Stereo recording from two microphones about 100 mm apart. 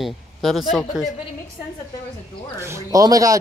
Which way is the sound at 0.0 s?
Centre (ahead or behind).